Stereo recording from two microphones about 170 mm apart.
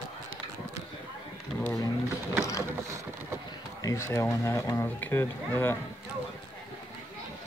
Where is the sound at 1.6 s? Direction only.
20° left (ahead or behind).